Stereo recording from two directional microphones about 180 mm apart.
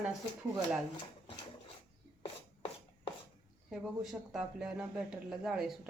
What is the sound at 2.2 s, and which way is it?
Rub, 30° left (ahead or behind).